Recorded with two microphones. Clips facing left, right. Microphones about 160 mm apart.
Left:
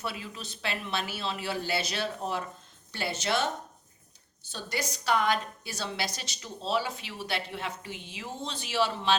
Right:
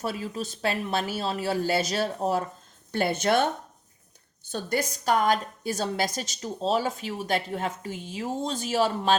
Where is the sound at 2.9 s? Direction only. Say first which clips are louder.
Right 7 dB; 50° right (ahead or behind).